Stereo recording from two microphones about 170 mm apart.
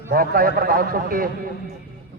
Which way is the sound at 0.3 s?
60° right (ahead or behind).